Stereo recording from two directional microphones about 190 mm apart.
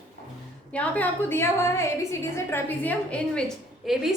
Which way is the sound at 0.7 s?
5° left (ahead or behind).